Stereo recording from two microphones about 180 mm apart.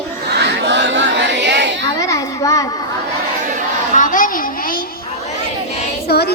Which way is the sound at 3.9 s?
45° left (ahead or behind).